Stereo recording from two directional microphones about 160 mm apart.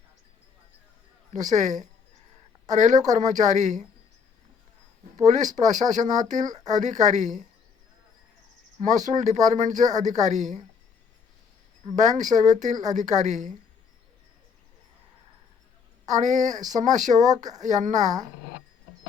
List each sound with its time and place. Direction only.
1.3 s speech: 50° right (ahead or behind)
5.2 s speech: 50° right (ahead or behind)
8.9 s speech: 50° right (ahead or behind)
11.9 s speech: 50° right (ahead or behind)
16.0 s speech: 50° right (ahead or behind)